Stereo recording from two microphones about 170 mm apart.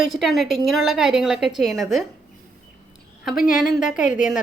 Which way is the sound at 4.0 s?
50° left (ahead or behind).